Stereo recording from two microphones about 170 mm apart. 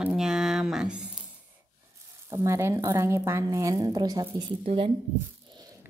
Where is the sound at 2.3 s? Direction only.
15° right (ahead or behind).